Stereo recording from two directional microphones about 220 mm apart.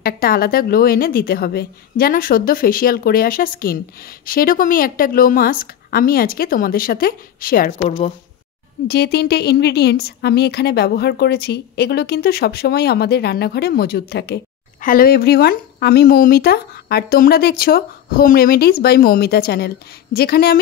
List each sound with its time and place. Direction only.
0.0 s a woman's voice: 40° left (ahead or behind)
8.8 s a woman's voice: 45° left (ahead or behind)